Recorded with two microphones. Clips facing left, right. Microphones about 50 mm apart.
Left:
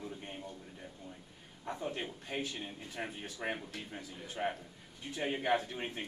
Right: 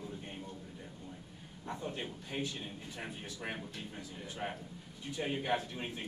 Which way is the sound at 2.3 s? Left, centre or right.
Left.